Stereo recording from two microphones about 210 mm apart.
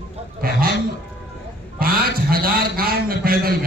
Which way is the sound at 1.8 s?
45° right (ahead or behind).